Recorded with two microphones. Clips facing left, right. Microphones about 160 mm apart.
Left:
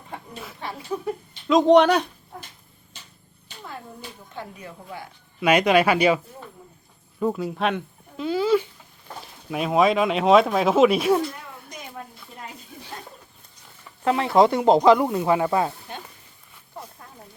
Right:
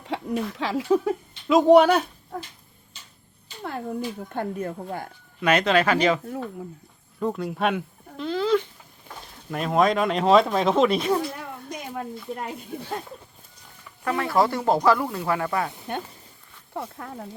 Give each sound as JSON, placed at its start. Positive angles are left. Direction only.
{"t": 0.1, "sound": "a sound", "side_deg": -90}
{"t": 0.5, "sound": "speech", "side_deg": -90}
{"t": 1.5, "sound": "speech", "side_deg": -5}
{"t": 4.3, "sound": "a woman's voice", "side_deg": -50}
{"t": 5.4, "sound": "speech", "side_deg": 10}
{"t": 7.2, "sound": "speech", "side_deg": 5}
{"t": 14.0, "sound": "speech", "side_deg": 20}
{"t": 16.7, "sound": "speech", "side_deg": -70}